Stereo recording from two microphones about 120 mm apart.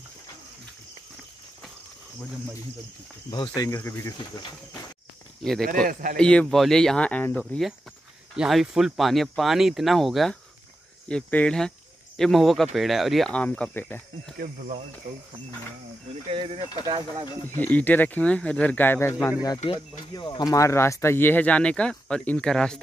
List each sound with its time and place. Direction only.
3.3 s speech: 35° left (ahead or behind)
3.7 s speech: 25° left (ahead or behind)
5.4 s speech: 5° left (ahead or behind)
8.4 s speech: 5° right (ahead or behind)
11.1 s speech: 10° left (ahead or behind)
13.3 s speech: 10° left (ahead or behind)
14.4 s speech: 70° right (ahead or behind)
16.3 s speech: 55° right (ahead or behind)
17.6 s speech: 15° left (ahead or behind)
19.6 s speech: 45° left (ahead or behind); by 22.8 s 5° left (ahead or behind)